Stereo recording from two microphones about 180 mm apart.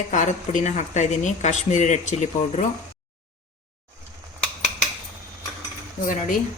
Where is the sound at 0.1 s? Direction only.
45° left (ahead or behind).